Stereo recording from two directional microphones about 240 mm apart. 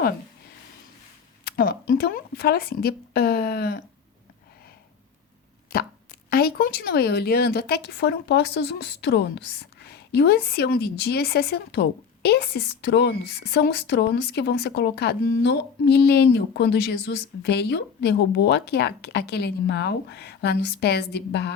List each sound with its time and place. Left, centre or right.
1.5 s a sound: left
1.9 s speech: left
6.3 s speech: left